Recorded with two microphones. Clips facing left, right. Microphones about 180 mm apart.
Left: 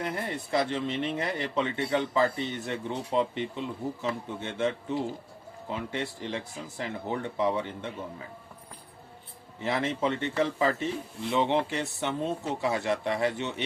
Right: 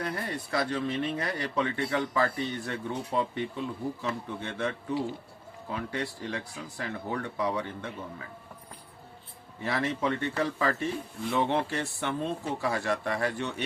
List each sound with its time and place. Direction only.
0.0 s speech: 20° left (ahead or behind)
9.6 s speech: 20° left (ahead or behind)